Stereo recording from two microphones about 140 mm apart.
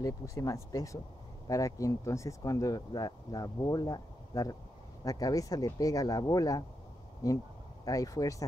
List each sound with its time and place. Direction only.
0.0 s speech: 25° left (ahead or behind)